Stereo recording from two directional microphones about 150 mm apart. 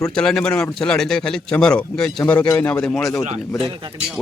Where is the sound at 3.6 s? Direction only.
35° right (ahead or behind).